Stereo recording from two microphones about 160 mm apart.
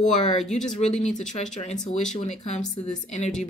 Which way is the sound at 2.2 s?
45° left (ahead or behind).